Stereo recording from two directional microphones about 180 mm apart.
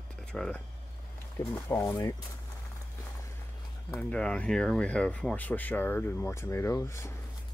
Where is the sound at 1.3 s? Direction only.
15° left (ahead or behind).